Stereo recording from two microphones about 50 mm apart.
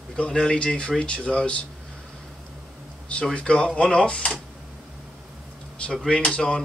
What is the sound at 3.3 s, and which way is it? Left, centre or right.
Speech, left.